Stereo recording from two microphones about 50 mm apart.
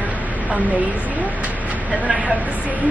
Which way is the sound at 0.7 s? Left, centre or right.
Right.